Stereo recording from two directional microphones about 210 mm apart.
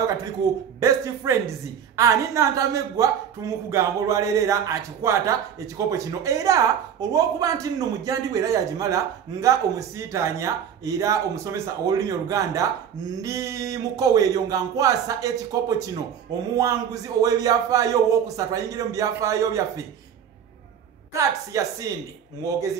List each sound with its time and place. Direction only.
0.7 s speech: 15° right (ahead or behind)
21.1 s speech: 15° right (ahead or behind)